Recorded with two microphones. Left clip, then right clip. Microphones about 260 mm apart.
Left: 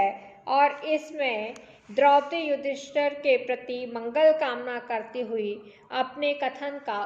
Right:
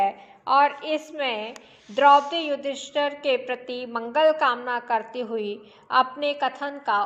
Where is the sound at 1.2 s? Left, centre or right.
Right.